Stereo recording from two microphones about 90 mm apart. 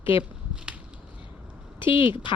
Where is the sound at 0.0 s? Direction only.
75° left (ahead or behind).